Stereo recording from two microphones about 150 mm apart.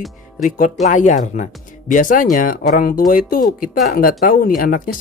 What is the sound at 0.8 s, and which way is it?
Speech, 55° left (ahead or behind).